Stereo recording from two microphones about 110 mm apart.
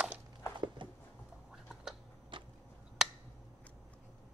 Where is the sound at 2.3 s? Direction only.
50° right (ahead or behind).